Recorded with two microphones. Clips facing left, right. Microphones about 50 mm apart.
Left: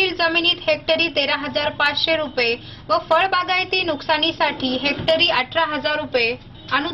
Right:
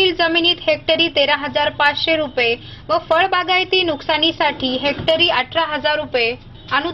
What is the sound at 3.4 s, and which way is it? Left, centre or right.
Speech, right.